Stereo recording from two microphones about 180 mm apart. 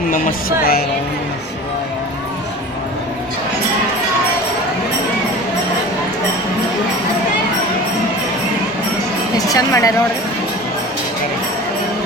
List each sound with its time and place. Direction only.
0.1 s music: 55° left (ahead or behind)
9.4 s a woman's voice: 20° left (ahead or behind)